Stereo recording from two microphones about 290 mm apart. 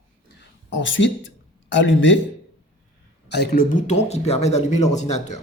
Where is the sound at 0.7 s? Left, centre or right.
Left.